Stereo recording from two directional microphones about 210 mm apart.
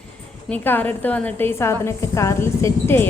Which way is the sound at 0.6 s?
10° left (ahead or behind).